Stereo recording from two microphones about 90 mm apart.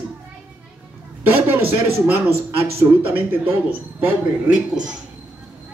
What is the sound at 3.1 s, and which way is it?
Speech, 25° right (ahead or behind).